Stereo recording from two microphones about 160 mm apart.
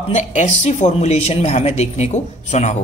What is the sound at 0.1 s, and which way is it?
Speech, 50° left (ahead or behind).